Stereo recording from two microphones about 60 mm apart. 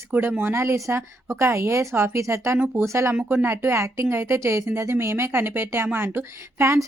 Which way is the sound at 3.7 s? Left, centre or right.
Right.